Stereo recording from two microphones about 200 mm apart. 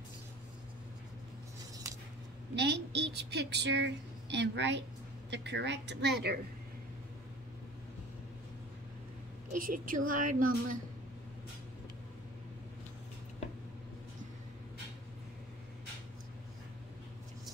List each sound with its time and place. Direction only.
2.5 s a woman's voice: 60° right (ahead or behind)
9.5 s a woman's voice: 45° right (ahead or behind)